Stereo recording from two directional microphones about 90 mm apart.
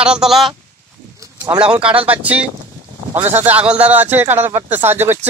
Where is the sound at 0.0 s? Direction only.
5° right (ahead or behind).